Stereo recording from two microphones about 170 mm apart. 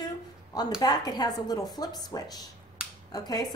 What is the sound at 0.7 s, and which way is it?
A woman's voice, 25° left (ahead or behind).